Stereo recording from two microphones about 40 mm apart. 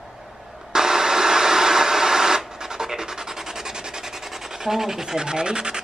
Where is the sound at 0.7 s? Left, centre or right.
Centre.